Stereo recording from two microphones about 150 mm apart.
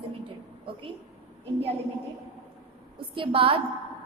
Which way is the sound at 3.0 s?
35° right (ahead or behind).